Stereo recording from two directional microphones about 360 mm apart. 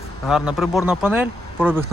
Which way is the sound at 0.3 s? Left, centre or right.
Centre.